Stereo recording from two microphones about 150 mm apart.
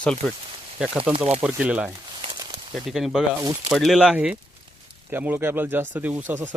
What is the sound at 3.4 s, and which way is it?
Speech, 20° right (ahead or behind).